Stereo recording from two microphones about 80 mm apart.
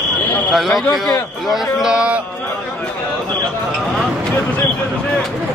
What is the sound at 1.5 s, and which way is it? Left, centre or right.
Speech, centre.